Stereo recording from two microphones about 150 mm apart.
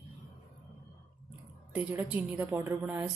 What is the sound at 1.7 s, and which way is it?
A woman's voice, 10° right (ahead or behind).